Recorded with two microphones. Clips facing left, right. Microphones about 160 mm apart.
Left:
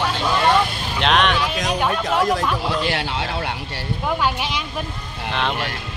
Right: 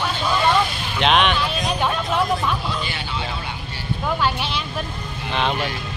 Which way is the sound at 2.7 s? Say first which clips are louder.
Left 5 dB; 90° left.